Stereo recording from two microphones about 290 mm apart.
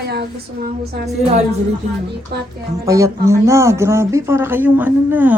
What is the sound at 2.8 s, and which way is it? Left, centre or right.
Speech, centre.